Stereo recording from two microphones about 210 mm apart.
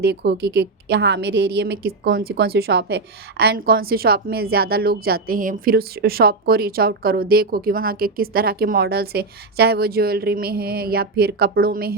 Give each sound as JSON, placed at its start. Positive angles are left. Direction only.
{"t": 0.0, "sound": "a woman's voice", "side_deg": -50}